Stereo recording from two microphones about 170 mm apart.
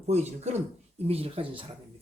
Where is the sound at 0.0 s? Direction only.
40° right (ahead or behind).